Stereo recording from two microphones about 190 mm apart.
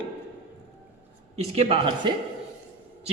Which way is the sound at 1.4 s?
35° right (ahead or behind).